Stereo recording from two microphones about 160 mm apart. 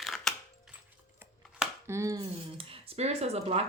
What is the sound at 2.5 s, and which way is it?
Speech, 40° right (ahead or behind).